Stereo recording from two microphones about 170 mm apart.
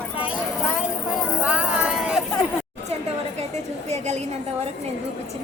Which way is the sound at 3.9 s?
40° right (ahead or behind).